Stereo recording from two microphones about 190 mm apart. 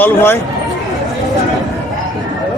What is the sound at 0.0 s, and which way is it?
Speech, 10° left (ahead or behind).